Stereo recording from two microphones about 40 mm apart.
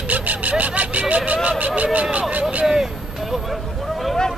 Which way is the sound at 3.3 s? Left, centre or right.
Centre.